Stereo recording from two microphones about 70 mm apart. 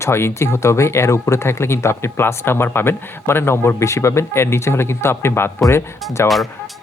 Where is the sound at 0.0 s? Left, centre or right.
Left.